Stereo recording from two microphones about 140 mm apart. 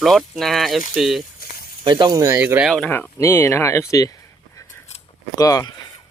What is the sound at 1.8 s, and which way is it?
Speech, 35° right (ahead or behind).